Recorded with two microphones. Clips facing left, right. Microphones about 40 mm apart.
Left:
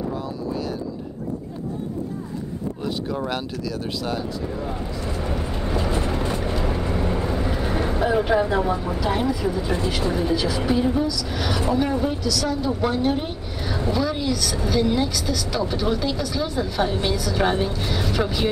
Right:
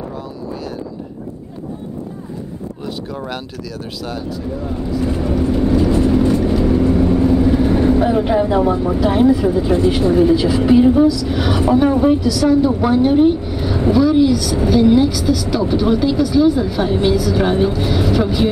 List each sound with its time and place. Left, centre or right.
5.3 s vehicle: centre
8.2 s a woman's voice: centre
9.0 s speech: right
10.6 s a woman's voice: centre